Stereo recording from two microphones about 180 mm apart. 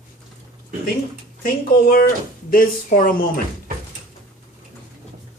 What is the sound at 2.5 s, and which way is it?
Speech, 50° left (ahead or behind).